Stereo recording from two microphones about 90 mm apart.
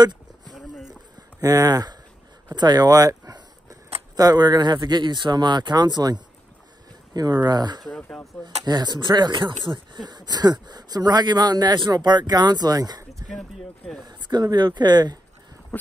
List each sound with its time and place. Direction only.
0.5 s a sound: centre (ahead or behind)
1.4 s speech: 45° right (ahead or behind)
2.5 s a sound: 50° right (ahead or behind)
4.2 s speech: 45° right (ahead or behind)
7.4 s speech: 50° right (ahead or behind)
7.8 s speech: 5° left (ahead or behind)
8.6 s speech: 50° right (ahead or behind)
13.3 s speech: 5° left (ahead or behind)
14.0 s speech: 50° right (ahead or behind)
15.7 s a sound: 10° left (ahead or behind)